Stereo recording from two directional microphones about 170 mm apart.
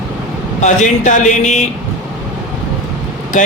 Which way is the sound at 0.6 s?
45° left (ahead or behind).